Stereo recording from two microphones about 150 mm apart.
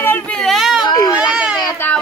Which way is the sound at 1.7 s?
10° left (ahead or behind).